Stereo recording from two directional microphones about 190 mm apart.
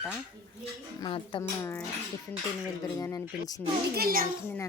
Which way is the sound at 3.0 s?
20° left (ahead or behind).